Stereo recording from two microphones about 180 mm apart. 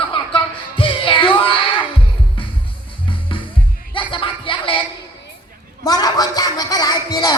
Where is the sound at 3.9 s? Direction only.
30° left (ahead or behind).